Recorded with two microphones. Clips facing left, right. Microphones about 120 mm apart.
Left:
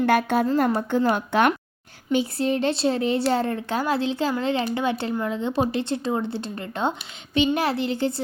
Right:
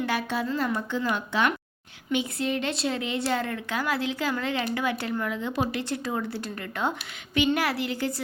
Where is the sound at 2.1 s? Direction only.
35° left (ahead or behind).